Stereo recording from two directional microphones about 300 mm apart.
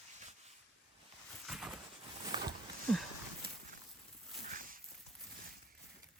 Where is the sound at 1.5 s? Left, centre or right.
Centre.